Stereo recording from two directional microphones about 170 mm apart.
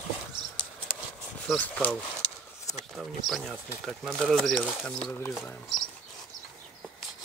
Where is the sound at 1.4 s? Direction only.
10° left (ahead or behind).